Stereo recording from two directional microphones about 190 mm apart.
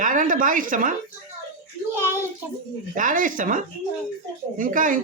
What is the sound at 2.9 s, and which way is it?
Speech, 45° right (ahead or behind).